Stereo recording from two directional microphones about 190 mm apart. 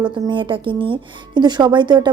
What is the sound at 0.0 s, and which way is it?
Speech, 25° right (ahead or behind).